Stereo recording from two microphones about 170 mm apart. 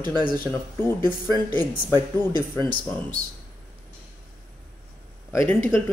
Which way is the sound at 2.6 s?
30° right (ahead or behind).